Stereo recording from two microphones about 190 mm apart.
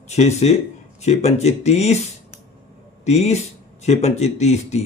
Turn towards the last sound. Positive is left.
turn(degrees=35)  # may be behind; listen again after turning